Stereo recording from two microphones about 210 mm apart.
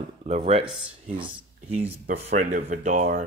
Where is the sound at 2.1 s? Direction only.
35° right (ahead or behind).